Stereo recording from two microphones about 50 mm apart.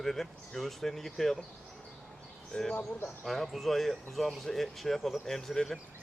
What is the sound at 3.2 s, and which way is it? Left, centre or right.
Speech, centre.